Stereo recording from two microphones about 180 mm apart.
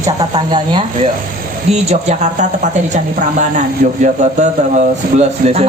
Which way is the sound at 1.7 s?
35° right (ahead or behind).